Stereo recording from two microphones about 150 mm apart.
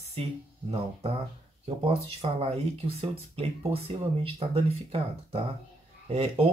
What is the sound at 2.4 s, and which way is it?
Speech, 40° right (ahead or behind).